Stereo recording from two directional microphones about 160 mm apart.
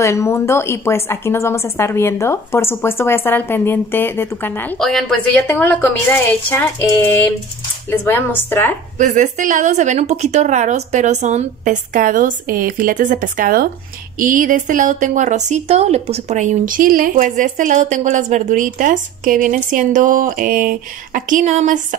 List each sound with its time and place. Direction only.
0.0 s speech: 15° left (ahead or behind)
8.9 s a woman's voice: 50° right (ahead or behind)